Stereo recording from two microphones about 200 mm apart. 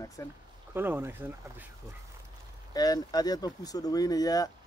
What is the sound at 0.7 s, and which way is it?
Speech, 10° right (ahead or behind).